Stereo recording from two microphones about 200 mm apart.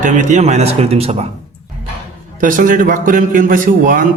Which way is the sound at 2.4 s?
40° right (ahead or behind).